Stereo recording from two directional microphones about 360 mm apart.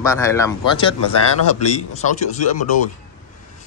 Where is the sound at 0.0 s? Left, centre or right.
Centre.